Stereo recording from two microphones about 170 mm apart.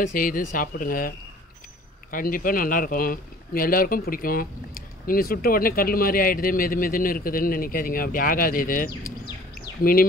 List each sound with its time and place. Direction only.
0.0 s speech: 55° left (ahead or behind)
9.6 s bird: 55° left (ahead or behind)